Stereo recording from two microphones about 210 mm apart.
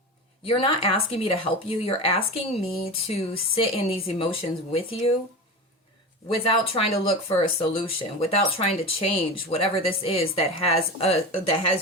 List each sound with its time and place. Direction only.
0.4 s speech: 25° left (ahead or behind)
6.2 s speech: 25° left (ahead or behind)